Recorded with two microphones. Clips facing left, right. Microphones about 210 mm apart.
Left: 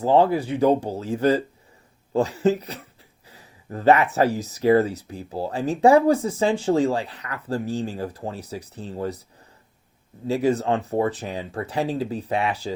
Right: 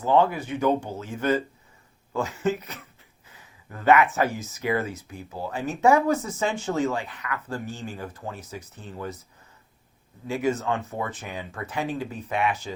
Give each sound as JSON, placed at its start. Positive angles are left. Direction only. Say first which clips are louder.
{"t": 0.0, "sound": "speech", "louder": "left 3 dB", "side_deg": 35}
{"t": 10.2, "sound": "speech", "louder": "left 4 dB", "side_deg": 35}